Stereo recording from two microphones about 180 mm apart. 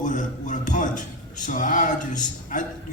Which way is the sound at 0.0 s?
45° left (ahead or behind).